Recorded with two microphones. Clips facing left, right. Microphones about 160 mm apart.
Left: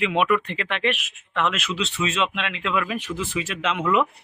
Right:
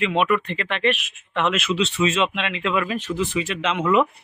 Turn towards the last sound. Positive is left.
turn(degrees=0)  # may be behind; listen again after turning